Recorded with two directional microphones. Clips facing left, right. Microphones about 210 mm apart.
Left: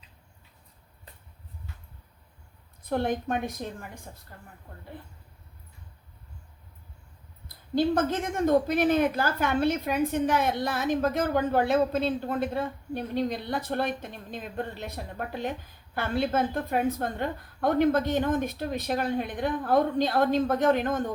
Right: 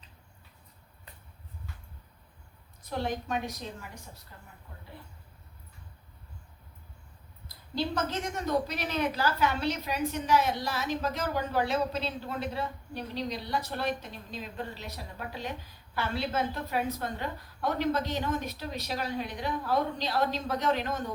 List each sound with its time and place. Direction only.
2.8 s a woman's voice: 55° left (ahead or behind)
7.8 s a woman's voice: 50° left (ahead or behind)